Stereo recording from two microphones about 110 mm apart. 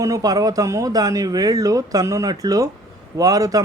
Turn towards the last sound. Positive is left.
turn(degrees=-35)  # may be behind; listen again after turning